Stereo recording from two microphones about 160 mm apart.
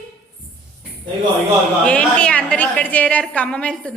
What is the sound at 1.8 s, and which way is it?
A woman's voice, 5° left (ahead or behind).